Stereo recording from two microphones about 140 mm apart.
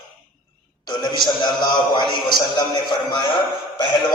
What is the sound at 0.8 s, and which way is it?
A man's voice, 30° left (ahead or behind).